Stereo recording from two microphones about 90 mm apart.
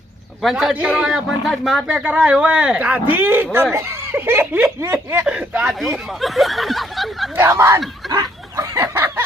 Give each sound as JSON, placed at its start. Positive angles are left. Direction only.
{"t": 0.5, "sound": "speech", "side_deg": -10}
{"t": 1.9, "sound": "speech", "side_deg": -10}
{"t": 6.1, "sound": "snicker", "side_deg": 0}
{"t": 7.3, "sound": "speech", "side_deg": -30}
{"t": 8.0, "sound": "chicken", "side_deg": 0}
{"t": 8.5, "sound": "a sound", "side_deg": -35}
{"t": 9.0, "sound": "a sound", "side_deg": -25}